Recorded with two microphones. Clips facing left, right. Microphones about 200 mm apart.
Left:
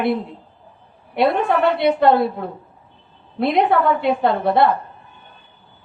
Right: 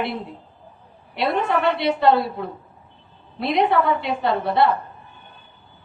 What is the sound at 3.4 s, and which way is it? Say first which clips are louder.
A woman's voice: left 3 dB; 50° left (ahead or behind).